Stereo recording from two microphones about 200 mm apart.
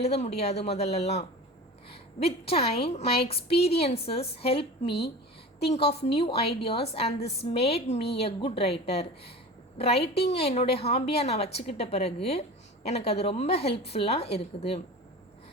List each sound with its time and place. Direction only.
0.0 s a woman's voice: 30° left (ahead or behind)
2.5 s a woman's voice: 30° left (ahead or behind)